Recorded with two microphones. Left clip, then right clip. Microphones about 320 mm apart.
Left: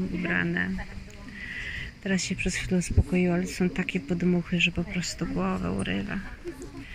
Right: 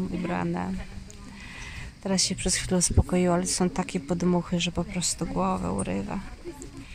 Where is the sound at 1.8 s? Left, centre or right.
Centre.